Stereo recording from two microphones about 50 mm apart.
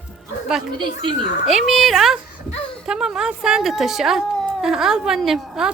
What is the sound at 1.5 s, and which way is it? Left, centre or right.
Speech, centre.